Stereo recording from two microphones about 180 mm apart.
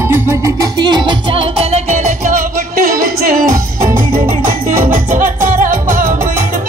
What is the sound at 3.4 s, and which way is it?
Music, 15° right (ahead or behind).